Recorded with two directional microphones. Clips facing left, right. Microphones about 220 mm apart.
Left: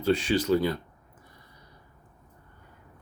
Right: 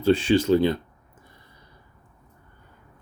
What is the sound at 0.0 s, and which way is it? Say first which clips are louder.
Speech: right 5 dB; 30° right (ahead or behind).